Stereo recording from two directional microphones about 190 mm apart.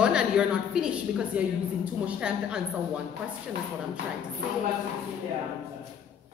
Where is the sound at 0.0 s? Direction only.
5° right (ahead or behind).